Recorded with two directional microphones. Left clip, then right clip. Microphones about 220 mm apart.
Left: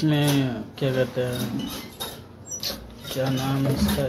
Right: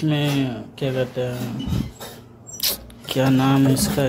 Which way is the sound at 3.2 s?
35° right (ahead or behind).